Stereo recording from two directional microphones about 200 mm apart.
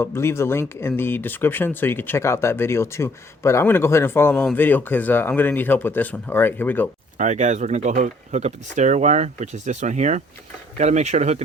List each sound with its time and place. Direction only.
0.0 s speech: 10° left (ahead or behind)
7.2 s speech: 35° right (ahead or behind)